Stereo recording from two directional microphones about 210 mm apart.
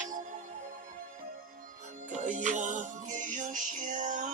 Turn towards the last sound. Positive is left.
turn(degrees=-40)  # may be behind; listen again after turning